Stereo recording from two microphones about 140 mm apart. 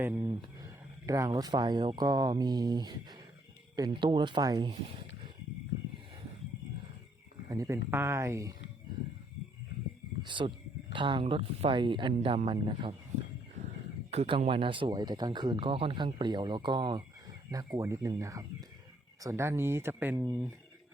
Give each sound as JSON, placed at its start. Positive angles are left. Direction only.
{"t": 0.2, "sound": "speech", "side_deg": -25}
{"t": 7.5, "sound": "speech", "side_deg": -20}
{"t": 10.2, "sound": "speech", "side_deg": -35}
{"t": 14.1, "sound": "speech", "side_deg": -45}
{"t": 17.7, "sound": "speech", "side_deg": -20}
{"t": 20.1, "sound": "speech", "side_deg": -25}